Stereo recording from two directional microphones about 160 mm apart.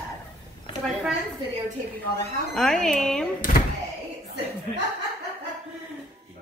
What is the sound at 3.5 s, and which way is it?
Speech, 60° left (ahead or behind).